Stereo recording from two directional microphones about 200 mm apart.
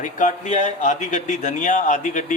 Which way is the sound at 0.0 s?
40° left (ahead or behind).